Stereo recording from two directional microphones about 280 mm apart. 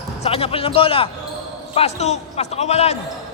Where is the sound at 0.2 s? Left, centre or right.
Left.